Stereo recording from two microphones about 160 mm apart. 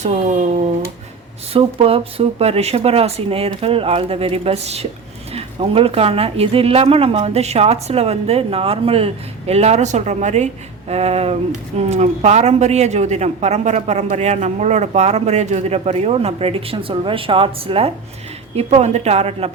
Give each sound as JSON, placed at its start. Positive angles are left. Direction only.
{"t": 0.0, "sound": "speech", "side_deg": -45}